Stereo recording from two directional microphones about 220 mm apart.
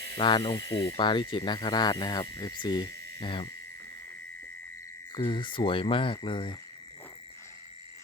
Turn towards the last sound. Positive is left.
turn(degrees=25)  # may be behind; listen again after turning